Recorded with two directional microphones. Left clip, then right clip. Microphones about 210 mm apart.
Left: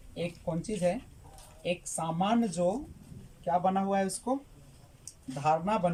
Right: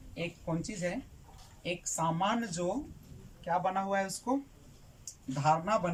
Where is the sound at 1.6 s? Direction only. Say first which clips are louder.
Left 1 dB; 15° left (ahead or behind).